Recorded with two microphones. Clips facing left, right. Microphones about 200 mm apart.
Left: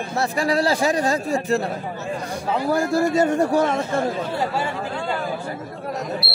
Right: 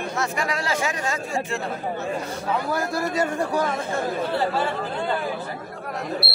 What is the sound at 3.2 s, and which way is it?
Speech, 25° left (ahead or behind).